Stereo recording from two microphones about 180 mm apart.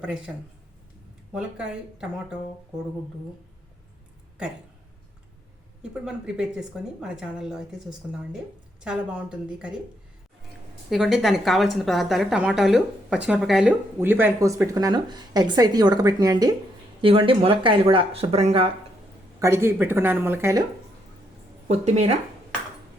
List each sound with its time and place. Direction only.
1.3 s a woman's voice: 5° right (ahead or behind)
5.9 s a woman's voice: 5° right (ahead or behind)
10.8 s a woman's voice: centre (ahead or behind); by 18.7 s 35° right (ahead or behind)
19.4 s a woman's voice: 15° right (ahead or behind)
21.7 s speech: 35° right (ahead or behind)